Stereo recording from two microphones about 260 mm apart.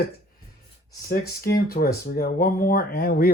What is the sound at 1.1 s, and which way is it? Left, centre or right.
Speech, left.